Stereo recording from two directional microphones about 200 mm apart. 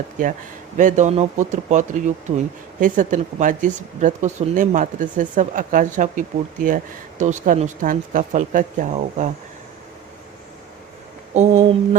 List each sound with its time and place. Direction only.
0.2 s speech: 40° right (ahead or behind)
2.3 s speech: 25° right (ahead or behind)
2.8 s speech: 40° right (ahead or behind)
11.3 s speech: 35° right (ahead or behind)